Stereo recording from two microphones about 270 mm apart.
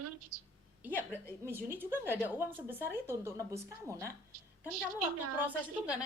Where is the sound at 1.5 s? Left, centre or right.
Centre.